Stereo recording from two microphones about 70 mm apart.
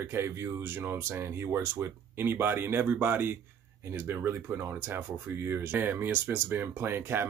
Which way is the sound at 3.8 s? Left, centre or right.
Right.